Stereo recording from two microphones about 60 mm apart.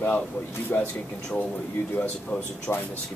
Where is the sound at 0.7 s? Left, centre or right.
Left.